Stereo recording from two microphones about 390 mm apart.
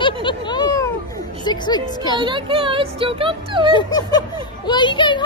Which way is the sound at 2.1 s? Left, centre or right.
Centre.